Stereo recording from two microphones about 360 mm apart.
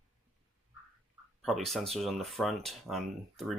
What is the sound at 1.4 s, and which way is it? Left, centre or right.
Speech, centre.